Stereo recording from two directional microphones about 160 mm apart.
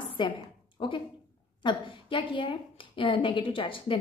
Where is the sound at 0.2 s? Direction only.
30° left (ahead or behind).